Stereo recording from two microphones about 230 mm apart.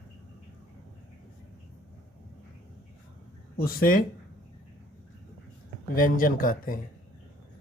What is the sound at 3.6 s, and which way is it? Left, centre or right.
Speech, left.